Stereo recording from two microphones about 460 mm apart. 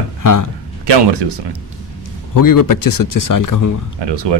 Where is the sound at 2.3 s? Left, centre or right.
Left.